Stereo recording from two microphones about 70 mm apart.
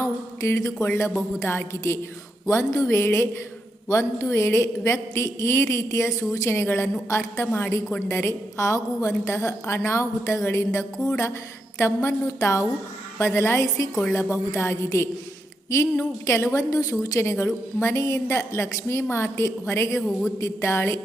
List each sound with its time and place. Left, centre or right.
0.0 s a woman's voice: left
12.0 s speech: left
16.2 s a woman's voice: left
20.0 s a man's voice: centre
20.4 s a woman's voice: left